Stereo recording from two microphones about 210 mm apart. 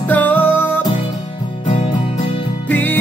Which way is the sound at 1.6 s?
30° left (ahead or behind).